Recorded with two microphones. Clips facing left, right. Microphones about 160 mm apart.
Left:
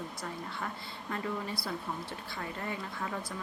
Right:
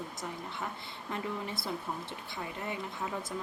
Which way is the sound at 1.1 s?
20° right (ahead or behind).